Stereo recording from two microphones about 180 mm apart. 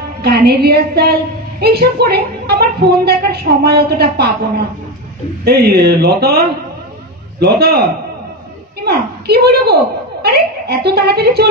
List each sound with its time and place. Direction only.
0.2 s a woman's voice: 65° right (ahead or behind)
5.4 s a woman's voice: 60° right (ahead or behind)
8.8 s a woman's voice: 65° right (ahead or behind)